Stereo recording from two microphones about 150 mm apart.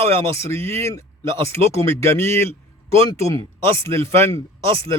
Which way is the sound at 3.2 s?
40° right (ahead or behind).